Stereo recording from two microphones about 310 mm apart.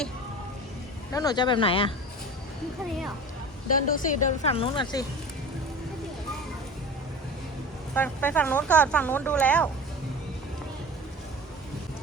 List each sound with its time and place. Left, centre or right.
1.1 s speech: centre
3.8 s a woman's voice: left
7.9 s speech: centre